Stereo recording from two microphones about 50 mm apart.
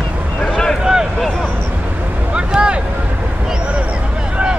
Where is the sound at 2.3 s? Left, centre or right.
Centre.